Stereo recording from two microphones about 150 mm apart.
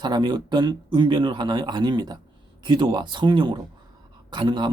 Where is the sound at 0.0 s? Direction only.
30° right (ahead or behind).